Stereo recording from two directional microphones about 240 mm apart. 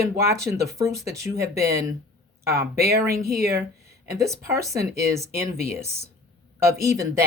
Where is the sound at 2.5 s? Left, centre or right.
Right.